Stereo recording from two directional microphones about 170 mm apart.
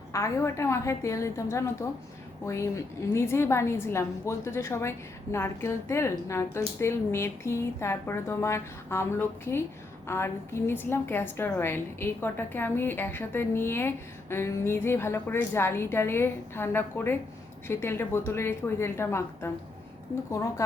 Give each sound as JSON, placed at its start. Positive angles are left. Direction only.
{"t": 0.1, "sound": "a woman's voice", "side_deg": 15}
{"t": 20.6, "sound": "a woman's voice", "side_deg": 15}